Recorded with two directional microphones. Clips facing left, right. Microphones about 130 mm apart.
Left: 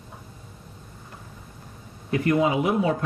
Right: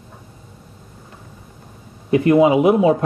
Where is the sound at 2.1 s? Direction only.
20° right (ahead or behind).